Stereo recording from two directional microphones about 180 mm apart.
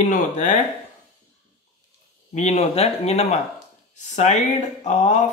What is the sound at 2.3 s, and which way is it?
Speech, 40° left (ahead or behind).